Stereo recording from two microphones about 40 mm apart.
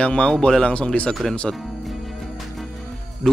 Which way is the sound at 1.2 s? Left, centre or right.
Centre.